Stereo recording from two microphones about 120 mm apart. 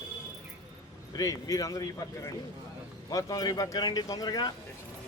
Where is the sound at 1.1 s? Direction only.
30° left (ahead or behind).